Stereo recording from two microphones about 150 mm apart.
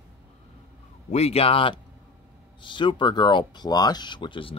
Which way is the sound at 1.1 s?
45° left (ahead or behind).